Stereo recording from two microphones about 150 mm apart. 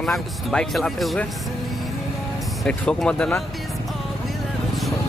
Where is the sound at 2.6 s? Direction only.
5° left (ahead or behind).